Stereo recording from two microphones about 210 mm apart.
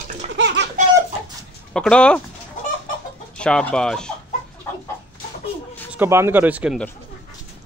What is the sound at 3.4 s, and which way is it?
Speech, 5° left (ahead or behind).